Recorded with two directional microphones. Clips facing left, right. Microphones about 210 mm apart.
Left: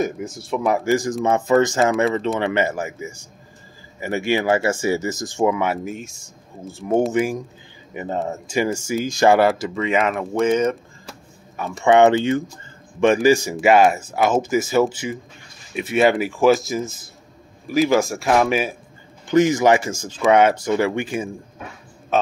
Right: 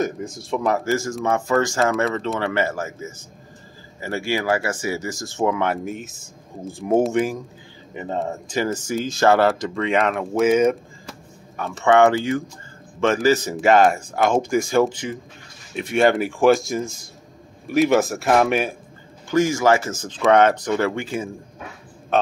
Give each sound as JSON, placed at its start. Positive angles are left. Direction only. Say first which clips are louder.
{"t": 0.0, "sound": "speech", "louder": "left 1 dB", "side_deg": 5}
{"t": 11.5, "sound": "speech", "louder": "left 1 dB", "side_deg": 10}
{"t": 19.2, "sound": "speech", "louder": "left 3 dB", "side_deg": 20}